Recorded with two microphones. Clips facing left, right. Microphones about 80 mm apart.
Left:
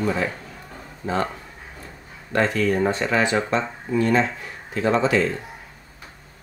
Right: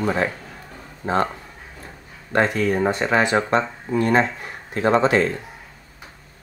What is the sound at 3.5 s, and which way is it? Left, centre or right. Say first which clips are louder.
Speech: right 3 dB; right.